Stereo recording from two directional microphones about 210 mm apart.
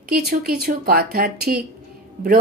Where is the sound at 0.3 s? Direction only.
45° right (ahead or behind).